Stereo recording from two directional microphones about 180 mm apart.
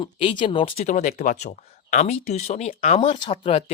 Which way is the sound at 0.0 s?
30° left (ahead or behind).